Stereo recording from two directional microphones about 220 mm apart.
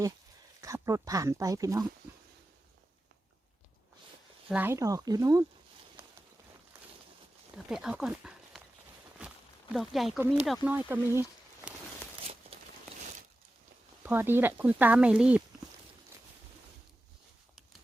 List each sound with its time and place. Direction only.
0.6 s speech: 15° right (ahead or behind)
4.4 s speech: 5° right (ahead or behind)
7.7 s speech: 5° right (ahead or behind)
9.2 s walk: 5° right (ahead or behind)
9.7 s speech: centre (ahead or behind)
12.2 s a sound: 25° right (ahead or behind)
14.0 s speech: 10° right (ahead or behind)